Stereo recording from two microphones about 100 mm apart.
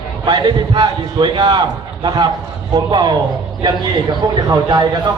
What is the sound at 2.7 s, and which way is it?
A man's voice, 45° right (ahead or behind).